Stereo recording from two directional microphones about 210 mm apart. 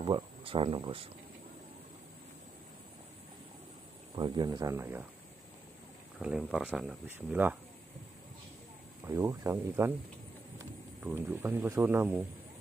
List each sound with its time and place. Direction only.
0.0 s speech: 25° right (ahead or behind)
4.1 s speech: 20° right (ahead or behind)
6.1 s speech: 5° right (ahead or behind)
9.0 s speech: 15° right (ahead or behind)